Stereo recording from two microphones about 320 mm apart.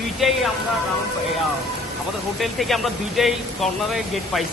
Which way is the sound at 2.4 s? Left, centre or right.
Centre.